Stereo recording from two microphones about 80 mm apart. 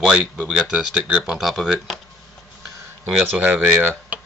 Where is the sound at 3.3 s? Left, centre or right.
Centre.